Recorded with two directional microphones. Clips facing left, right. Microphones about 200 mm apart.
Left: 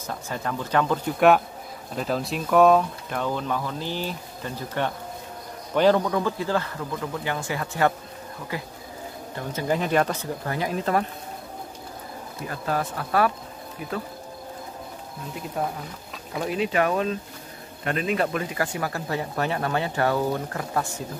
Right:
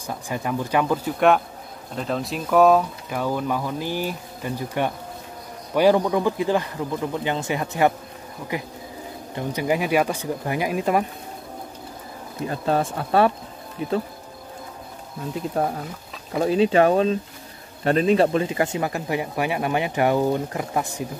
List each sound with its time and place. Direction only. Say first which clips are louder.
0.0 s speech: right 2 dB; 15° right (ahead or behind)
2.0 s speech: even; centre (ahead or behind); by 11.1 s 15° right (ahead or behind)
12.4 s speech: right 5 dB; 25° right (ahead or behind)
16.3 s speech: right 7 dB; 30° right (ahead or behind)